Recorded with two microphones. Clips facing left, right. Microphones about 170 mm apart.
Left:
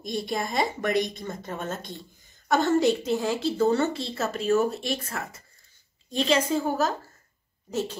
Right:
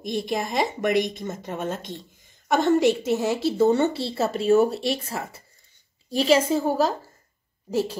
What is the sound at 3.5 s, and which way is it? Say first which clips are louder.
Speech: right 4 dB; 20° right (ahead or behind).